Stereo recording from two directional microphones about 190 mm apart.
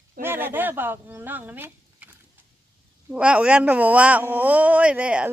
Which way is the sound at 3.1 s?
5° right (ahead or behind).